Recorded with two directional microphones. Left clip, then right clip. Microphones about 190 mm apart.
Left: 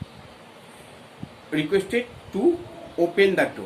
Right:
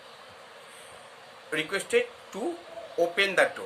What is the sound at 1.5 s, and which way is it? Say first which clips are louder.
Speech: left 5 dB; 40° right (ahead or behind).